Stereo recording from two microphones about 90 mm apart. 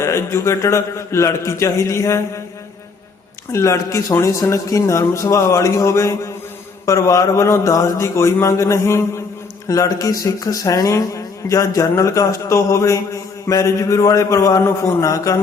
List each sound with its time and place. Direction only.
0.0 s speech: 30° left (ahead or behind)
3.5 s speech: 35° left (ahead or behind)